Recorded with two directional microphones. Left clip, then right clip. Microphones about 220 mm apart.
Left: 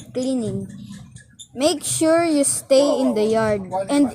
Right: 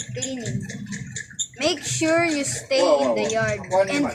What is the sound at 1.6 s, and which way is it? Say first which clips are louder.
Speech: left 4 dB; 45° left (ahead or behind).